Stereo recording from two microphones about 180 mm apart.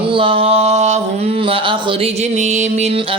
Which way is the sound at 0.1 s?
30° right (ahead or behind).